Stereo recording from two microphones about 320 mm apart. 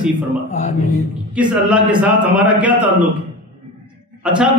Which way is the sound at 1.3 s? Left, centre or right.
Centre.